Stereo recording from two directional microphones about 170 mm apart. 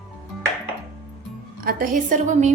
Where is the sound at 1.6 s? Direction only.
55° right (ahead or behind).